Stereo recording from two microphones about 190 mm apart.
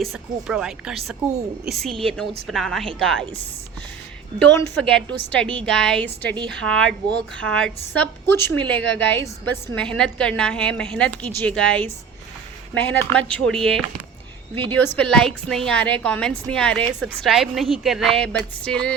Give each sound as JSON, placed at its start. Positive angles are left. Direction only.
{"t": 0.0, "sound": "a woman's voice", "side_deg": 0}
{"t": 4.4, "sound": "a woman's voice", "side_deg": 10}